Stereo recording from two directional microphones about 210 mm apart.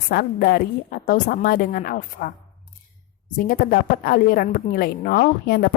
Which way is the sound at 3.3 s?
40° left (ahead or behind).